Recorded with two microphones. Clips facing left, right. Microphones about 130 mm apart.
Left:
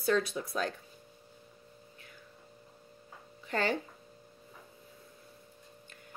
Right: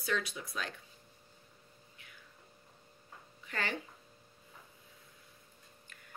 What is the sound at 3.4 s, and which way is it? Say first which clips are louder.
Speech: left 7 dB; 35° left (ahead or behind).